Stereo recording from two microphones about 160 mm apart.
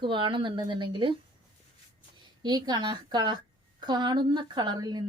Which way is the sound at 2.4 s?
25° right (ahead or behind).